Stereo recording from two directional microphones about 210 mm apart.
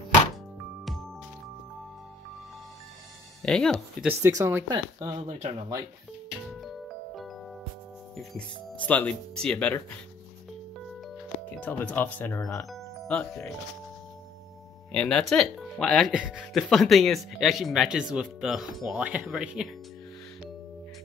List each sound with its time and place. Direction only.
3.4 s speech: 5° left (ahead or behind)
4.2 s speech: 15° right (ahead or behind)
6.6 s music: centre (ahead or behind)
8.8 s speech: 5° left (ahead or behind)
11.6 s speech: 5° left (ahead or behind)
14.9 s speech: 5° left (ahead or behind)